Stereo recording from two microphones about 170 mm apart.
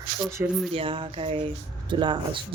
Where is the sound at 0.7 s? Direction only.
30° right (ahead or behind).